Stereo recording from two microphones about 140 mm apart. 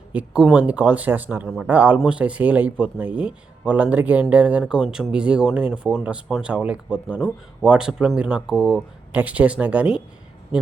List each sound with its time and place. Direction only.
0.1 s speech: 10° right (ahead or behind)